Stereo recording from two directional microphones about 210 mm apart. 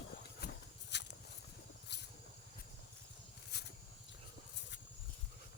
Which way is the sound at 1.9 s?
55° left (ahead or behind).